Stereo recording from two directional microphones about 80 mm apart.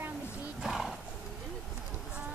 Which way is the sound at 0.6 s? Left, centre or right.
Centre.